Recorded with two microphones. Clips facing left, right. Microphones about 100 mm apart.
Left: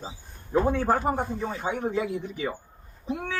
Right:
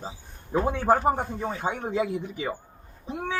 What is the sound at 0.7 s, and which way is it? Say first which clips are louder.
Speech: right 2 dB; 15° right (ahead or behind).